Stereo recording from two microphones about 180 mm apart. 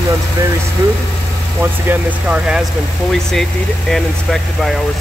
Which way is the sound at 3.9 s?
Centre (ahead or behind).